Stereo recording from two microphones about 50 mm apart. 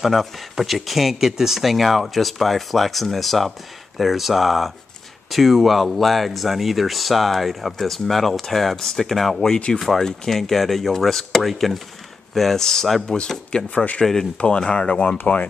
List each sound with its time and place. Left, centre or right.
0.0 s speech: centre
13.1 s speech: centre
13.7 s speech: left